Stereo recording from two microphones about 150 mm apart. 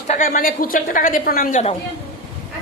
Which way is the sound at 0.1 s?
65° left (ahead or behind).